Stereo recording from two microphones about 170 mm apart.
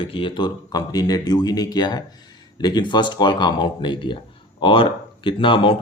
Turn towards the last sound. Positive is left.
turn(degrees=30)  # may be behind; listen again after turning